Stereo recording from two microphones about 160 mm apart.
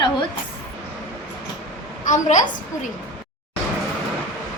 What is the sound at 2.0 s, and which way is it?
Speech, 50° left (ahead or behind).